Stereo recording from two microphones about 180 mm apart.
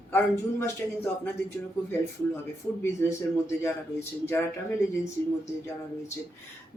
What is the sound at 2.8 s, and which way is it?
Speech, 15° left (ahead or behind).